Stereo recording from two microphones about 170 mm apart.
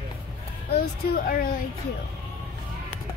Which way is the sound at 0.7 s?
60° left (ahead or behind).